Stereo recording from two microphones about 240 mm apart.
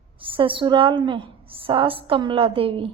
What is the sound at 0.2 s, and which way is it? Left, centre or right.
A woman's voice, right.